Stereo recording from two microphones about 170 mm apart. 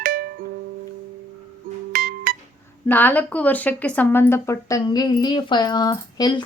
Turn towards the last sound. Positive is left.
turn(degrees=25)  # may be behind; listen again after turning